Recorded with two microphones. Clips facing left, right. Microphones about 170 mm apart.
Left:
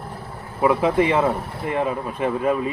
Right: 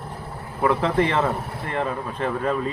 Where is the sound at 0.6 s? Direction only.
10° left (ahead or behind).